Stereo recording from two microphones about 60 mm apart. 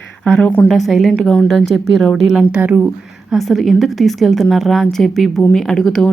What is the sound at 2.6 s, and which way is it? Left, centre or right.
Speech, right.